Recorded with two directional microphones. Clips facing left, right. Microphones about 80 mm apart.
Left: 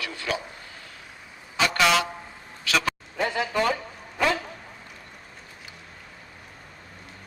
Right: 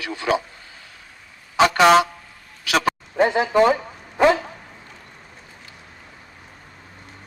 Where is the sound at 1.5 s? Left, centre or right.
Right.